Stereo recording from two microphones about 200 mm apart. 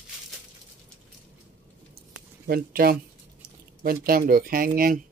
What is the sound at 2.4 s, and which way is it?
Speech, 50° right (ahead or behind).